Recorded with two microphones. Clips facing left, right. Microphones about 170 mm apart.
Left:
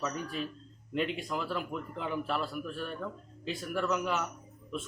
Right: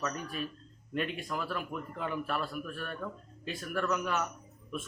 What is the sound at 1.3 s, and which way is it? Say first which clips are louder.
A man's voice: left 2 dB; 20° left (ahead or behind).